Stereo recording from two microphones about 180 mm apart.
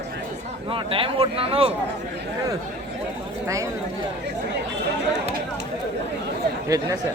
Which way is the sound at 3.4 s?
15° right (ahead or behind).